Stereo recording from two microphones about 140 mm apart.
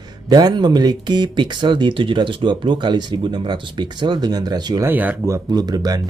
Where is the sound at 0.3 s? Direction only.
30° right (ahead or behind).